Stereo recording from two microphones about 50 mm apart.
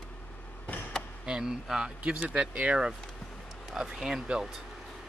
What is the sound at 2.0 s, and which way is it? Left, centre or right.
Speech, right.